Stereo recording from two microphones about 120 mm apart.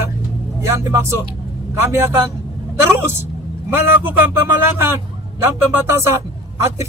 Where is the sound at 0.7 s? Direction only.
25° right (ahead or behind).